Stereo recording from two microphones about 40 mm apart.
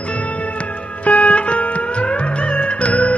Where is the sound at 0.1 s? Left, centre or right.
Left.